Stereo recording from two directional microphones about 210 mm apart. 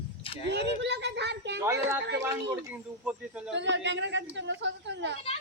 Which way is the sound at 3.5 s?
55° right (ahead or behind).